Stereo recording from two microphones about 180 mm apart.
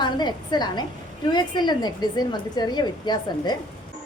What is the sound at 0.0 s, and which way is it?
A woman's voice, 25° left (ahead or behind).